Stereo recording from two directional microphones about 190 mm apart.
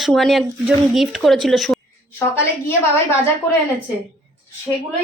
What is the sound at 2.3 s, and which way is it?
Speech, 15° left (ahead or behind).